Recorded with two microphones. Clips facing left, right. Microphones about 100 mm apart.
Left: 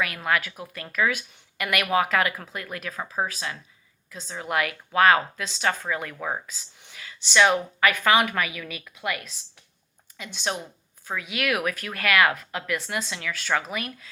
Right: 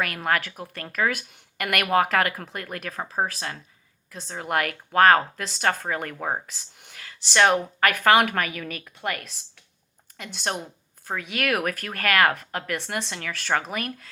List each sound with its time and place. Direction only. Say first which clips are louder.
0.0 s speech: even; 50° right (ahead or behind)